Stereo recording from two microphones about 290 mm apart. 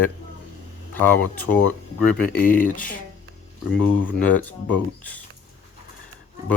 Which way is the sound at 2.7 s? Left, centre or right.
Left.